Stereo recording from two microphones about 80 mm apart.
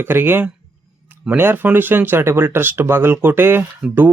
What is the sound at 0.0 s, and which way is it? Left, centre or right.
Speech, right.